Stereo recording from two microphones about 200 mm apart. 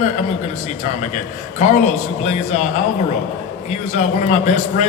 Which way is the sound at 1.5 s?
35° left (ahead or behind).